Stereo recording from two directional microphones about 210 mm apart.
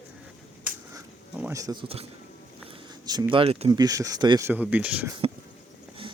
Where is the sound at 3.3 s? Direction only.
25° right (ahead or behind); by 5.1 s 5° right (ahead or behind).